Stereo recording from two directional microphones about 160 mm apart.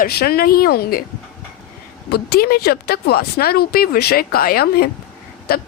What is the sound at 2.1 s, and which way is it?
Speech, 80° left.